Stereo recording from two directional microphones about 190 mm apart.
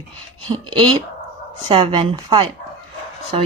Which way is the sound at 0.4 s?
25° right (ahead or behind).